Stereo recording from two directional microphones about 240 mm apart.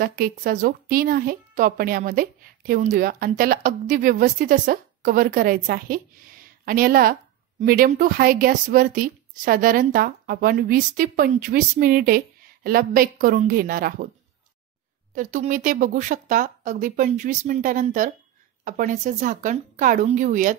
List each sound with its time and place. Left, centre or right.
0.0 s speech: right
15.1 s speech: right